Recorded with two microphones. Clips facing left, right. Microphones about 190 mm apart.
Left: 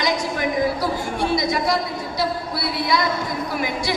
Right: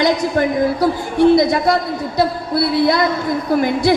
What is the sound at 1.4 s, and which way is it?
Speech, 55° right (ahead or behind).